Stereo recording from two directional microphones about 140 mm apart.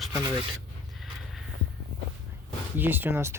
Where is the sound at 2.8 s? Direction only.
15° right (ahead or behind).